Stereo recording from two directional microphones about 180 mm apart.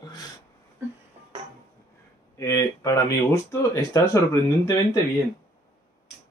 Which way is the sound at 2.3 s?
15° left (ahead or behind).